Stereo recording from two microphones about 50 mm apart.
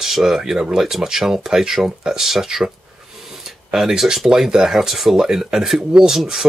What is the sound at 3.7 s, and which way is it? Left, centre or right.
Speech, centre.